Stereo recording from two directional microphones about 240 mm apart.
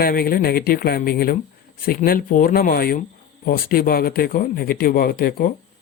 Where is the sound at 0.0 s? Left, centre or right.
Left.